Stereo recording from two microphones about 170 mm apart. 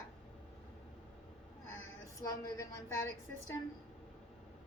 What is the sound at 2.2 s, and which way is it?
Speech, 20° left (ahead or behind).